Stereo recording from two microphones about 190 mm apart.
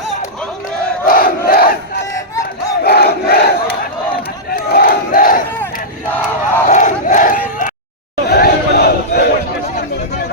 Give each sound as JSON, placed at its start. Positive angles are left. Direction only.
{"t": 1.0, "sound": "crowd", "side_deg": 50}
{"t": 2.8, "sound": "crowd", "side_deg": 55}
{"t": 6.7, "sound": "crowd", "side_deg": 40}
{"t": 8.3, "sound": "battle cry", "side_deg": 55}